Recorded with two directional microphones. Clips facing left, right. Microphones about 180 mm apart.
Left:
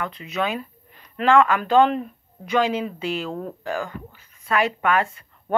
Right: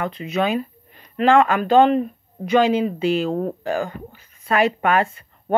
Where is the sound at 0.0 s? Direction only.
30° right (ahead or behind).